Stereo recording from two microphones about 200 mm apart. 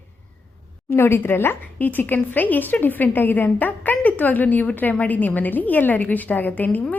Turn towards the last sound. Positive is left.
turn(degrees=10)  # may be behind; listen again after turning